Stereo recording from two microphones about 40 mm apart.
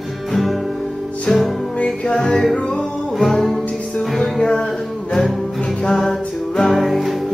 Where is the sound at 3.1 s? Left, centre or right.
Centre.